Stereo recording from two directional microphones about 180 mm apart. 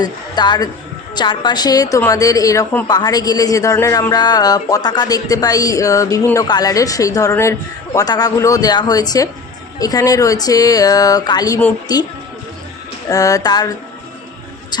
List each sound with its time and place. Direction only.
0.0 s a woman's voice: 25° left (ahead or behind)
13.1 s a woman's voice: 20° left (ahead or behind)